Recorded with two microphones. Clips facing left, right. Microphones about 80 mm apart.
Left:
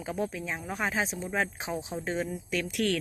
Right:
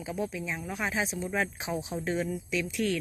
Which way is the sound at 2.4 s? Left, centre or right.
Left.